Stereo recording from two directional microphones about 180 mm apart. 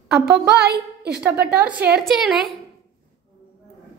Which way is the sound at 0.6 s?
60° right (ahead or behind).